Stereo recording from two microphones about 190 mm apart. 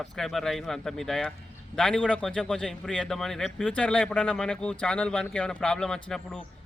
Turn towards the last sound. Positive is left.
turn(degrees=5)  # may be behind; listen again after turning